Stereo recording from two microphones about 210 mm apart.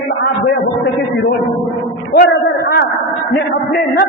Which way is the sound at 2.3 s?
50° left (ahead or behind).